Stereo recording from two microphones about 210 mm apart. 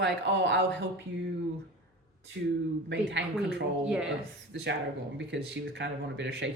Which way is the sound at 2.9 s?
55° right (ahead or behind).